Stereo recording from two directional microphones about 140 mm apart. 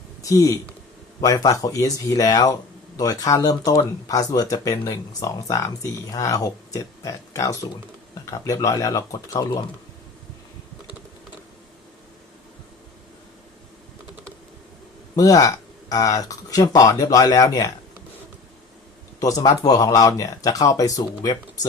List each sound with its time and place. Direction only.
0.2 s speech: 25° left (ahead or behind)
15.1 s speech: 25° left (ahead or behind)
19.2 s speech: 25° left (ahead or behind)